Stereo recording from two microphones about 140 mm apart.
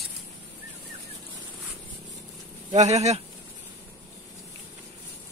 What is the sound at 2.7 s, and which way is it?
Speech, 55° right (ahead or behind).